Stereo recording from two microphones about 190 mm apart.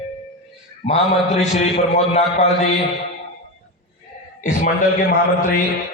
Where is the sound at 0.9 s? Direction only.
35° left (ahead or behind).